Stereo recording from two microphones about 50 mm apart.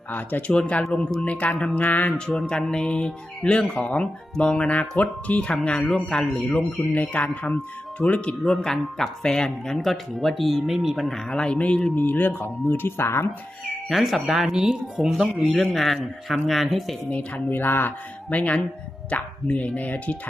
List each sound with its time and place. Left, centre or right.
0.1 s speech: left
0.7 s speech: left
2.0 s speech: centre
6.9 s speech: left
7.9 s speech: left
8.4 s speech: centre
11.1 s speech: centre
11.9 s speech: left
13.8 s speech: centre
17.1 s speech: left
17.5 s speech: left
18.3 s speech: left